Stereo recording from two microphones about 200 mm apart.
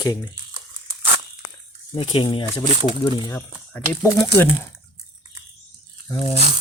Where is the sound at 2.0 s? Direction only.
25° left (ahead or behind).